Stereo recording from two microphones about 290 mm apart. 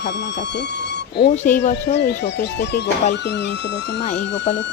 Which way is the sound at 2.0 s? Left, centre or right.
Left.